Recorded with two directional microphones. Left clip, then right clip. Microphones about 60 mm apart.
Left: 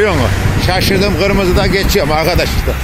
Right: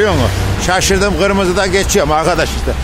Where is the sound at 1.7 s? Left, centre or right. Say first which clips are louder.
Right 1 dB; right.